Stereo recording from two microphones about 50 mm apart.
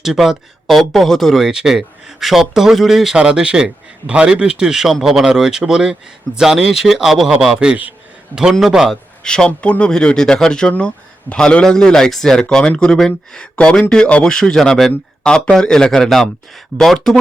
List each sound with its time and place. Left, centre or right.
0.0 s speech: centre
1.5 s speech: centre
7.6 s a man's voice: centre
8.6 s speech: centre
9.2 s a man's voice: centre
9.5 s a man's voice: left; by 14.9 s centre
15.2 s a man's voice: centre
16.0 s speech: centre